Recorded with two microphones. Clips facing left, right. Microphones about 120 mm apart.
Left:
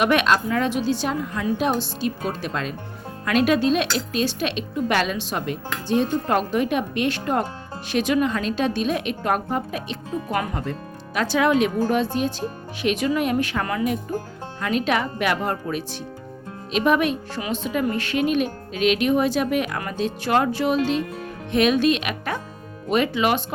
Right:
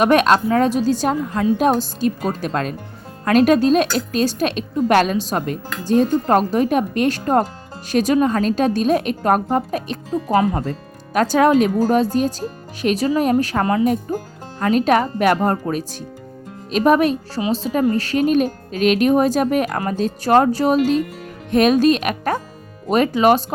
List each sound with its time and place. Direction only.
0.0 s a woman's voice: 40° right (ahead or behind)